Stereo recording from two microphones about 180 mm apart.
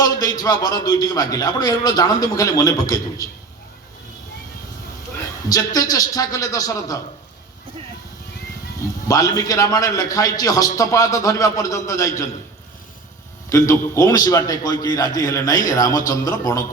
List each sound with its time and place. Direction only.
0.0 s a man's voice: 20° left (ahead or behind)
5.5 s a man's voice: 20° left (ahead or behind)
9.0 s a man's voice: 20° left (ahead or behind)
13.5 s a man's voice: 15° left (ahead or behind)